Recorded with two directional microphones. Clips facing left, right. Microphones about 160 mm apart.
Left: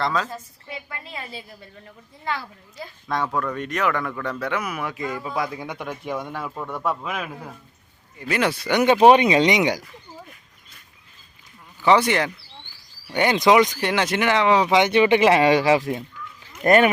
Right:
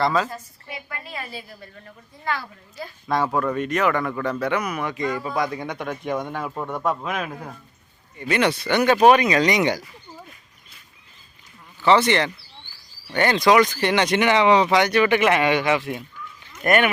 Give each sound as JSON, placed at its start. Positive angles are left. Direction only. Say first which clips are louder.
{"t": 0.0, "sound": "speech", "louder": "right 3 dB", "side_deg": -5}
{"t": 0.9, "sound": "a woman's voice", "louder": "right 1 dB", "side_deg": 20}
{"t": 3.1, "sound": "speech", "louder": "right 3 dB", "side_deg": -5}
{"t": 6.5, "sound": "a man's voice", "louder": "right 2 dB", "side_deg": -20}
{"t": 6.8, "sound": "speech", "louder": "right 1 dB", "side_deg": 0}
{"t": 8.8, "sound": "speech", "louder": "left 1 dB", "side_deg": 25}
{"t": 11.8, "sound": "speech", "louder": "even", "side_deg": 10}
{"t": 13.7, "sound": "speech", "louder": "right 2 dB", "side_deg": 5}
{"t": 14.7, "sound": "speech", "louder": "left 1 dB", "side_deg": 20}